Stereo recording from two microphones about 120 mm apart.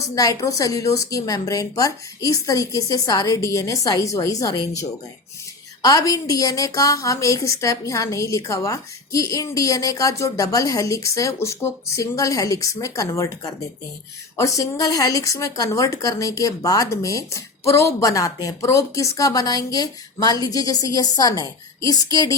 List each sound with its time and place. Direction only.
0.2 s speech: 30° left (ahead or behind)